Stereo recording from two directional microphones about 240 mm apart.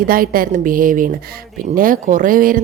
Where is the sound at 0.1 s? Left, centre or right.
Right.